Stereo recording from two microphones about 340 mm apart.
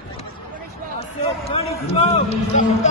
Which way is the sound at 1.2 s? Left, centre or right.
Centre.